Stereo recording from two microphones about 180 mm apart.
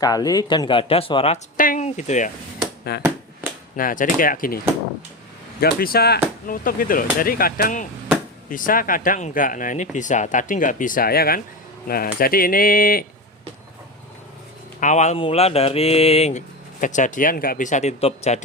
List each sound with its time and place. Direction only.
0.0 s speech: 20° left (ahead or behind)
1.5 s a sound: 50° left (ahead or behind)
2.9 s speech: 65° left (ahead or behind)
3.8 s speech: 50° left (ahead or behind)
14.8 s speech: 40° left (ahead or behind)